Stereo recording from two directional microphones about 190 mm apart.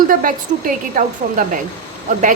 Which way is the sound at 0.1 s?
45° right (ahead or behind).